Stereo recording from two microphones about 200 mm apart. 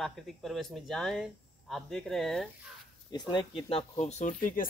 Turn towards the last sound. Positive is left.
turn(degrees=45)  # may be behind; listen again after turning